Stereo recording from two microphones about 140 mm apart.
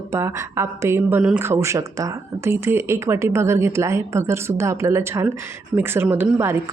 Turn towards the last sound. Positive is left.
turn(degrees=-15)  # may be behind; listen again after turning